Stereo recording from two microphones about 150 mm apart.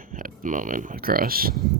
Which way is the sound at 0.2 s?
60° right (ahead or behind).